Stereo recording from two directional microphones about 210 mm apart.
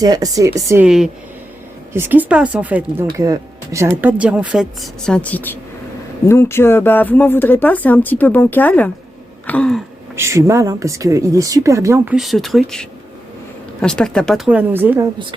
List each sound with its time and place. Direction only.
0.0 s speech: 20° right (ahead or behind)
0.9 s speech: centre (ahead or behind)
10.2 s speech: 15° right (ahead or behind)